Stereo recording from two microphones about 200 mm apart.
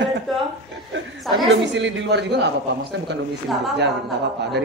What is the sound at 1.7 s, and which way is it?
Speech, 65° right (ahead or behind).